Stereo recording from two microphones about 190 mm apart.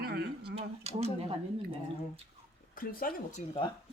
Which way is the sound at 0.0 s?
55° right (ahead or behind).